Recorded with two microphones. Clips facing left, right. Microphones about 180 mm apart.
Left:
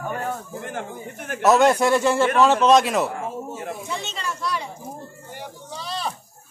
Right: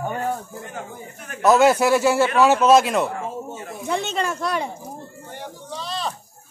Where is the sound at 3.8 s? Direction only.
55° right (ahead or behind).